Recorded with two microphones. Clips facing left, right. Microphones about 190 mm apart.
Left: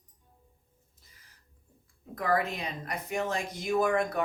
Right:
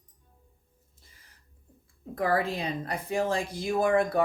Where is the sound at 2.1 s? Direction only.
30° right (ahead or behind).